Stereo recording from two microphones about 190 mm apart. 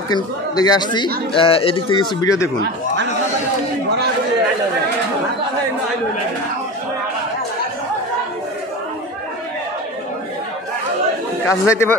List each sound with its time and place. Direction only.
0.1 s speech: 20° left (ahead or behind)
11.4 s speech: 15° left (ahead or behind)